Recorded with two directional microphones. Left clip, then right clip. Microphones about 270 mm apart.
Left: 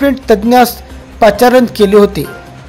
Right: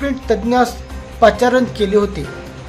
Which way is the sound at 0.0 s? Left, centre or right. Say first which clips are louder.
Left 8 dB; left.